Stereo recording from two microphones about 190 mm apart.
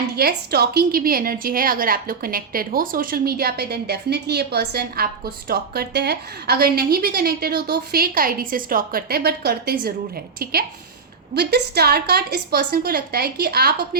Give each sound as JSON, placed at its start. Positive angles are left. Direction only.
{"t": 0.2, "sound": "a woman's voice", "side_deg": -55}